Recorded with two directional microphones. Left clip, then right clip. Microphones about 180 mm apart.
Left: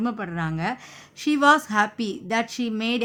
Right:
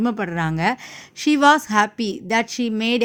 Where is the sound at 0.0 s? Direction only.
35° right (ahead or behind).